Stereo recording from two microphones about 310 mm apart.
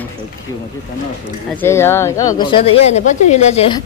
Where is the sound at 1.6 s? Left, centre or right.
Centre.